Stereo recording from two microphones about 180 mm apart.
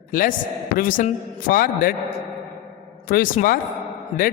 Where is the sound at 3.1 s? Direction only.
50° left (ahead or behind).